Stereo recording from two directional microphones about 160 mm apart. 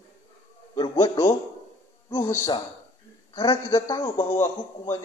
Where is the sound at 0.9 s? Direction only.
25° left (ahead or behind).